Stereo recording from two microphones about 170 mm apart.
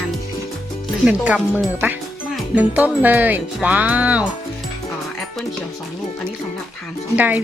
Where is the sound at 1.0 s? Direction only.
5° right (ahead or behind).